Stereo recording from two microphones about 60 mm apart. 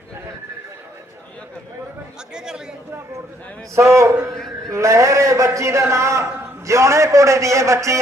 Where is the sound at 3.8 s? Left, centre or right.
Right.